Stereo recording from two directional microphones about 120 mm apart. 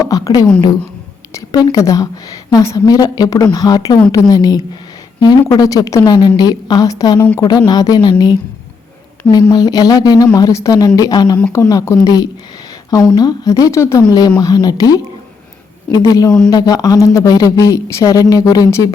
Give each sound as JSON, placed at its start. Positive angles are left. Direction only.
{"t": 0.0, "sound": "a woman's voice", "side_deg": 30}
{"t": 9.5, "sound": "a woman's voice", "side_deg": 35}